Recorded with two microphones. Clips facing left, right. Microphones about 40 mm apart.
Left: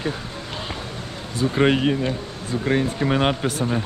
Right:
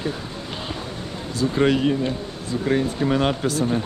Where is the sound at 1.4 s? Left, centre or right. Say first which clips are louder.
Even; left.